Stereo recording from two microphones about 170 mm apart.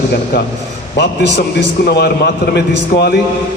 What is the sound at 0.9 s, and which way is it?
Speech, 85° left.